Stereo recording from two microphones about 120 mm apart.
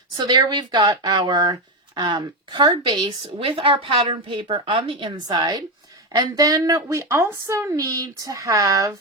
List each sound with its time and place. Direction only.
0.2 s a woman's voice: 35° right (ahead or behind)
6.1 s speech: 30° right (ahead or behind)